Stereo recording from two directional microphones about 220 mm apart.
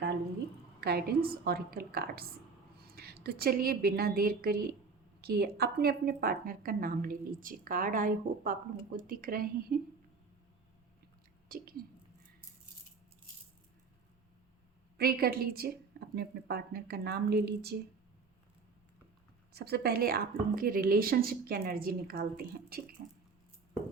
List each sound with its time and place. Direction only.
0.8 s a woman's voice: 45° right (ahead or behind)
11.4 s speech: 40° right (ahead or behind)
14.9 s a woman's voice: 45° right (ahead or behind)
19.5 s a woman's voice: 45° right (ahead or behind)
23.0 s a sound: 45° right (ahead or behind)